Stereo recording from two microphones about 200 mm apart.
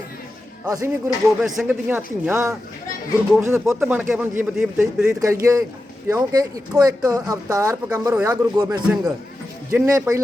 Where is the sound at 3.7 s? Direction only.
5° right (ahead or behind).